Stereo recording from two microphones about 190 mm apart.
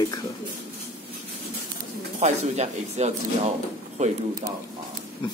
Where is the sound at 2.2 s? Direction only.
35° right (ahead or behind).